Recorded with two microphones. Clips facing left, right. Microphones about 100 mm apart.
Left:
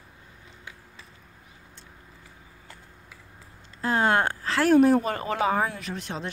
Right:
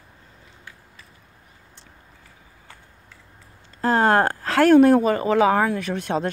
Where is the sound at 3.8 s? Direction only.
40° right (ahead or behind); by 5.0 s 70° right (ahead or behind).